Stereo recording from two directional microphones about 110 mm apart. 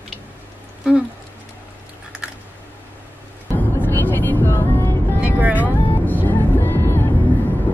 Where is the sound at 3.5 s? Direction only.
15° left (ahead or behind).